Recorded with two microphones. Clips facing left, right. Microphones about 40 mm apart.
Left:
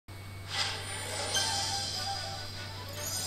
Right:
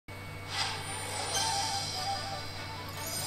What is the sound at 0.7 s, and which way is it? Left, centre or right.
Music, right.